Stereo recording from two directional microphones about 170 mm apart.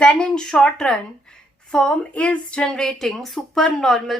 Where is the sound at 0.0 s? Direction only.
5° left (ahead or behind).